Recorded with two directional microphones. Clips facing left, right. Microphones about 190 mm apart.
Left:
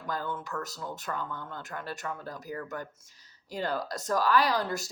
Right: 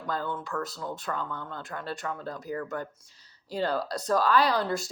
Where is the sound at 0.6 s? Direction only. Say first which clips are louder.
Right 3 dB; 40° left (ahead or behind).